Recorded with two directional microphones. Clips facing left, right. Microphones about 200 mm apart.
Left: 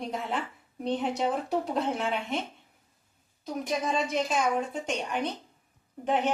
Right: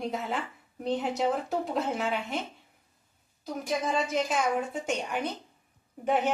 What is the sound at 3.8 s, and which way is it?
A woman's voice, centre (ahead or behind).